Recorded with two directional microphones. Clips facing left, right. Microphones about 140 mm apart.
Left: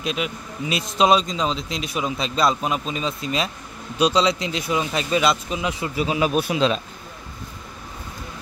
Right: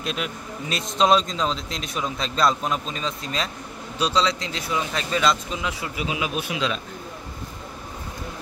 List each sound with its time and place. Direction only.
0.0 s a man's voice: 5° left (ahead or behind); by 5.9 s 20° left (ahead or behind)
5.9 s speech: 40° left (ahead or behind)